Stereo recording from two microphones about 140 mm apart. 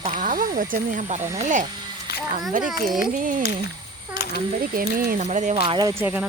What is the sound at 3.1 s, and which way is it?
Speech, 75° right (ahead or behind).